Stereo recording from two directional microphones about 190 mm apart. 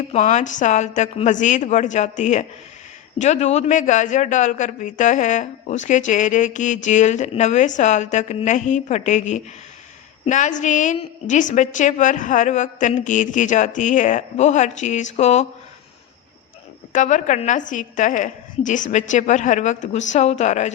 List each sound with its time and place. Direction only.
0.1 s a man's voice: 35° left (ahead or behind)
16.9 s a man's voice: 40° left (ahead or behind)